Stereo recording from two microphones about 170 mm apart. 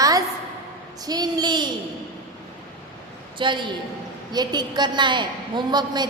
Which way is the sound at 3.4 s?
30° right (ahead or behind).